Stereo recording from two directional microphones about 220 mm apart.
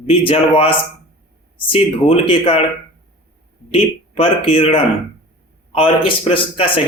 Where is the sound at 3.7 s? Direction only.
25° left (ahead or behind).